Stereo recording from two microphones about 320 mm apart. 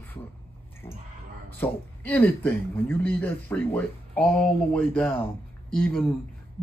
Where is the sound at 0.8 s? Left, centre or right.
Centre.